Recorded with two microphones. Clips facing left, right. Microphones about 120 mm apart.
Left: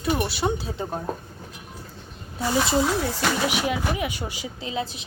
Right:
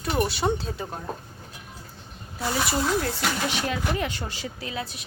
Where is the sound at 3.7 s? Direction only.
10° left (ahead or behind).